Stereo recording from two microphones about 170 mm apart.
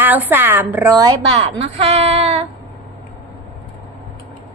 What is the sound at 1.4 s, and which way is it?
A woman's voice, 40° right (ahead or behind).